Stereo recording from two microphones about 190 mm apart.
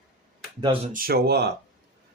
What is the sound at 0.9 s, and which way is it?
Speech, 50° right (ahead or behind).